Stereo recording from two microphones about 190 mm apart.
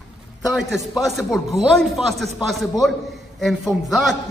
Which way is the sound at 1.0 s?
Centre (ahead or behind).